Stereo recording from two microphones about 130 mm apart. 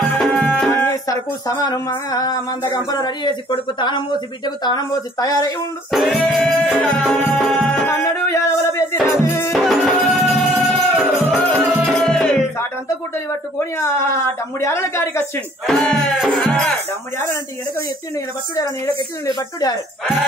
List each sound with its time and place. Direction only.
0.0 s music: 5° left (ahead or behind)
0.7 s music: 15° left (ahead or behind)
1.5 s a woman's voice: 30° left (ahead or behind)
5.9 s music: centre (ahead or behind)
8.0 s a sound: 20° left (ahead or behind)
9.5 s music: centre (ahead or behind)
13.7 s speech: 20° left (ahead or behind)
15.6 s music: 5° left (ahead or behind)